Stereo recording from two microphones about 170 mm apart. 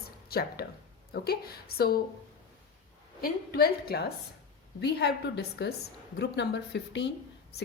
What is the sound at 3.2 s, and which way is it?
Speech, 65° left (ahead or behind).